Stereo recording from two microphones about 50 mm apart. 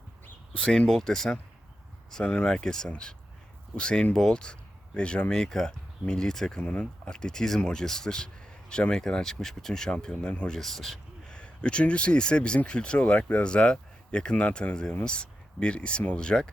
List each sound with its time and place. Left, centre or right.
0.6 s speech: centre
6.6 s speech: left
10.6 s speech: centre
11.3 s speech: centre